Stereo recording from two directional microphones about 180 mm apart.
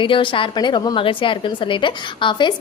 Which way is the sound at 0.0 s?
30° left (ahead or behind).